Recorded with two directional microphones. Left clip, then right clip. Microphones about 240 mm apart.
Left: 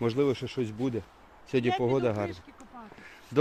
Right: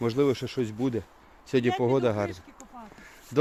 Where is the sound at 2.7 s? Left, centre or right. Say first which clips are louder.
Right 2 dB; right.